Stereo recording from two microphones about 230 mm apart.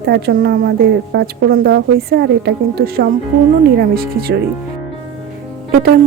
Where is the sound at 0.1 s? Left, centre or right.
Right.